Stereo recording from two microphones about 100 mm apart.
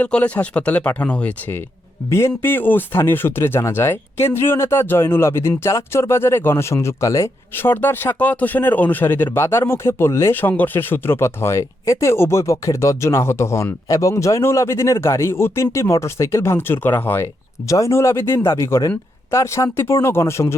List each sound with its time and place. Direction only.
0.0 s speech: 15° left (ahead or behind)
17.7 s speech: 30° left (ahead or behind)